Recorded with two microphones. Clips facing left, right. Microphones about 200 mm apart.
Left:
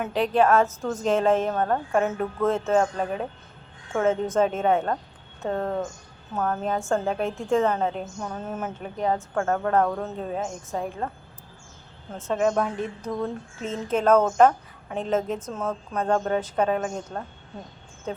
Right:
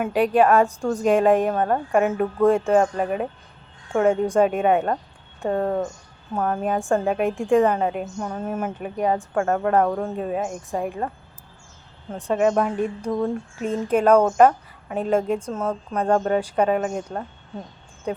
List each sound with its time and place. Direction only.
0.0 s a woman's voice: 10° right (ahead or behind)
12.1 s a woman's voice: 10° right (ahead or behind)